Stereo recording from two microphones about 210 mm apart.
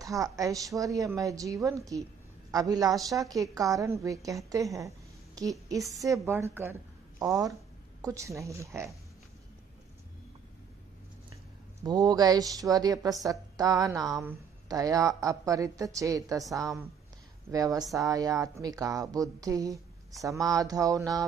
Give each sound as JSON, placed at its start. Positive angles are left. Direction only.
{"t": 0.0, "sound": "speech", "side_deg": -15}
{"t": 11.8, "sound": "speech", "side_deg": -20}